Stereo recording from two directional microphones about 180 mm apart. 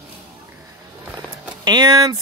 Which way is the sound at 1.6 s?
25° right (ahead or behind).